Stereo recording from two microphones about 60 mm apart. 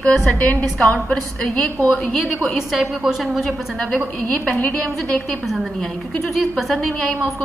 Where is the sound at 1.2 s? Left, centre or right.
Centre.